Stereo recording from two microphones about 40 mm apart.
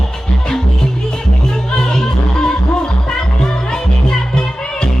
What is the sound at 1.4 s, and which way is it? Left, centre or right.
Music, centre.